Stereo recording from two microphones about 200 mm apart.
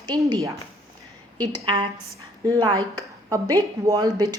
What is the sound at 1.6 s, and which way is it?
Speech, 25° right (ahead or behind).